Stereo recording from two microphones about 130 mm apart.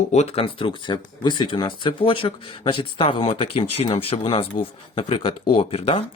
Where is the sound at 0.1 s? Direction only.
55° left (ahead or behind).